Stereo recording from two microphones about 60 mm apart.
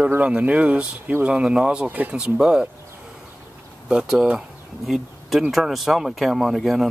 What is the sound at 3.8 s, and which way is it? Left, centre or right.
Speech, centre.